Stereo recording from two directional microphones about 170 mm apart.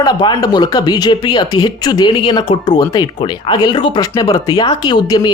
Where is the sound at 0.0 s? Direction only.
25° left (ahead or behind).